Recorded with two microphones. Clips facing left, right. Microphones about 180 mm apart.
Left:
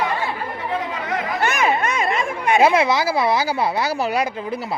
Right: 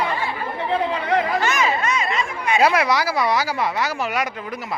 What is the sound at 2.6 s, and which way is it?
Speech, 25° left (ahead or behind).